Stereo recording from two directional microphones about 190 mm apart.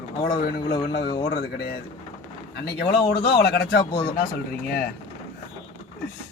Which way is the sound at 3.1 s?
55° left (ahead or behind).